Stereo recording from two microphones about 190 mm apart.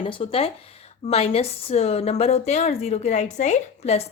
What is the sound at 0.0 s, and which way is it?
A woman's voice, 30° left (ahead or behind).